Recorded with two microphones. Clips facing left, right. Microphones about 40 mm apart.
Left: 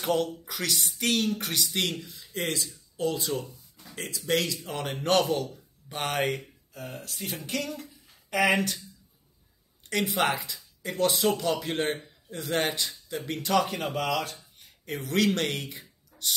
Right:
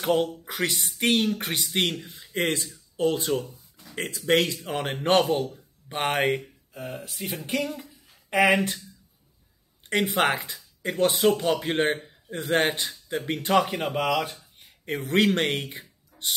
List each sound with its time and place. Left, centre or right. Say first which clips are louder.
0.5 s speech: right 3 dB; right
9.8 s speech: right 3 dB; right
13.7 s speech: right 3 dB; centre